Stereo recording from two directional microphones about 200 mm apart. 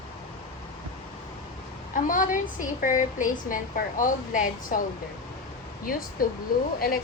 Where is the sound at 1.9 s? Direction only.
40° left (ahead or behind).